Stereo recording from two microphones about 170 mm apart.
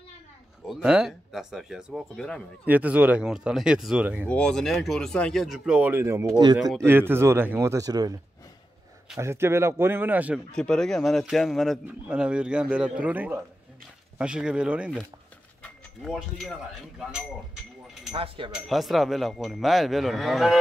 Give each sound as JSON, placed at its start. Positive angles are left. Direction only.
{"t": 0.7, "sound": "speech", "side_deg": -5}
{"t": 2.6, "sound": "speech", "side_deg": -10}
{"t": 4.3, "sound": "speech", "side_deg": 5}
{"t": 6.6, "sound": "speech", "side_deg": 0}
{"t": 6.9, "sound": "speech", "side_deg": -15}
{"t": 9.2, "sound": "speech", "side_deg": -15}
{"t": 10.5, "sound": "speech", "side_deg": 5}
{"t": 15.6, "sound": "mechanisms", "side_deg": 0}
{"t": 18.1, "sound": "speech", "side_deg": -35}
{"t": 18.5, "sound": "speech", "side_deg": 0}